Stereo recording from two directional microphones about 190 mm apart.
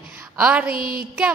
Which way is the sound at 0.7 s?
50° right (ahead or behind).